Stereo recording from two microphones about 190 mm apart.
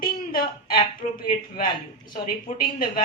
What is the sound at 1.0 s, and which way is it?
Speech, 35° left (ahead or behind).